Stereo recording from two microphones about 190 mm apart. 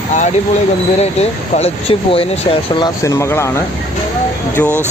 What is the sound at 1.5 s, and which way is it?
Speech, 30° left (ahead or behind).